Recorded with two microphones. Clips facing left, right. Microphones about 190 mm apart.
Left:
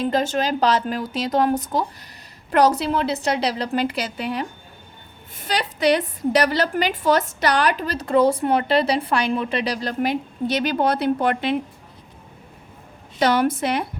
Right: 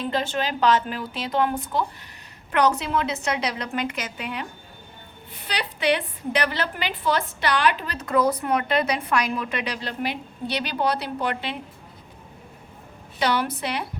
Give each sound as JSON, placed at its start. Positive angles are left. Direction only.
{"t": 0.0, "sound": "a woman's voice", "side_deg": 40}
{"t": 13.1, "sound": "a woman's voice", "side_deg": 45}